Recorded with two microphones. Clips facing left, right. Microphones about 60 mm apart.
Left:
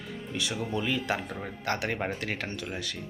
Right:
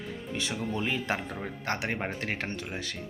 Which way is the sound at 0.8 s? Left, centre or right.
Right.